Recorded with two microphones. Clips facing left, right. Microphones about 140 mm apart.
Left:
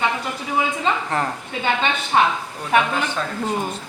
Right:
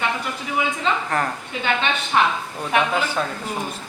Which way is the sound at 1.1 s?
25° left (ahead or behind).